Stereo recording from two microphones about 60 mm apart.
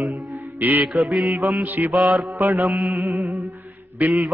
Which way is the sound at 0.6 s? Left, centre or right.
Right.